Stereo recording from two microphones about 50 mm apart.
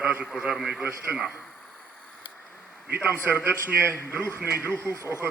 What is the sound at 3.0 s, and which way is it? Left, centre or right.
Speech, right.